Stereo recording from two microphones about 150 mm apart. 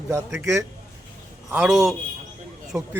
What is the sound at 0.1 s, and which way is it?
Speech, 20° right (ahead or behind).